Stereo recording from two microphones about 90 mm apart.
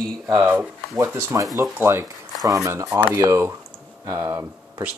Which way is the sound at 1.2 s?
35° right (ahead or behind).